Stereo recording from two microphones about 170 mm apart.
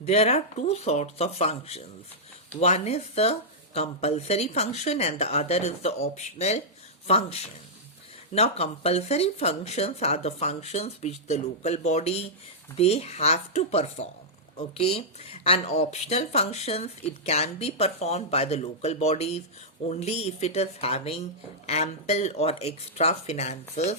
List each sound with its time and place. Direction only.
0.0 s speech: 40° left (ahead or behind)